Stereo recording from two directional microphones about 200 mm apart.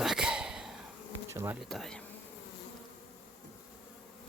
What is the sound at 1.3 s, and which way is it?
Bee, 15° right (ahead or behind).